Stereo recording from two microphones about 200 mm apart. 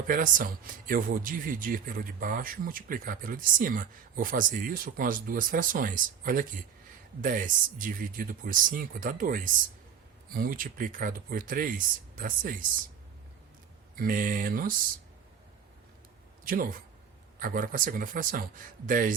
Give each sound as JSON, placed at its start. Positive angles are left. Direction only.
{"t": 0.1, "sound": "speech", "side_deg": -40}
{"t": 13.9, "sound": "speech", "side_deg": -45}
{"t": 16.4, "sound": "speech", "side_deg": -45}